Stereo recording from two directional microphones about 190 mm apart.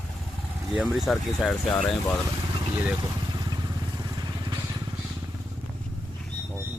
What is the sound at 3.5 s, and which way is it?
Vehicle, 20° right (ahead or behind).